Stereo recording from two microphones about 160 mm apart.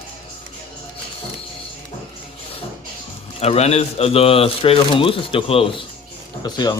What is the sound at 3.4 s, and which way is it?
Speech, 40° left (ahead or behind).